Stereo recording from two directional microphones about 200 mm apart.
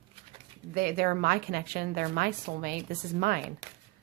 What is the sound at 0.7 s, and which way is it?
Speech, 50° right (ahead or behind).